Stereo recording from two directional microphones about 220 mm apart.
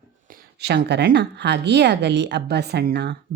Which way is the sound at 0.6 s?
50° right (ahead or behind).